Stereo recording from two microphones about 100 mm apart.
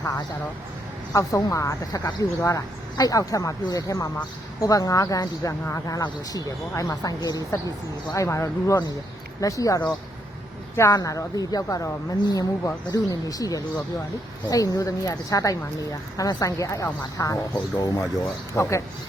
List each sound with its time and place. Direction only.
1.1 s speech: 35° left (ahead or behind)